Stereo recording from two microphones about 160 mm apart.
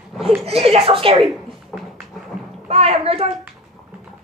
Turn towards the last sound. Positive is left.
turn(degrees=-40)  # may be behind; listen again after turning